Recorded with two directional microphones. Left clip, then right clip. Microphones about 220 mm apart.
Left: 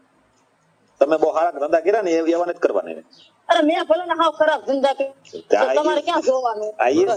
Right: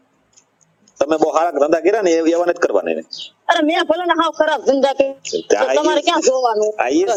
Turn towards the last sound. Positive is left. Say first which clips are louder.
# right 2 dB
turn(degrees=-45)  # may be behind; listen again after turning